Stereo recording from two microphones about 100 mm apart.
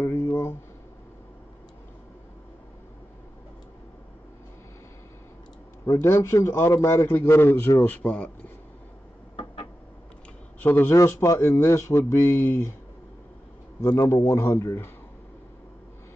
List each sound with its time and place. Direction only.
0.0 s a sound: 25° left (ahead or behind)
5.9 s speech: 25° left (ahead or behind)
7.9 s speech: 10° left (ahead or behind)
10.6 s speech: 20° left (ahead or behind)
13.7 s speech: 30° left (ahead or behind)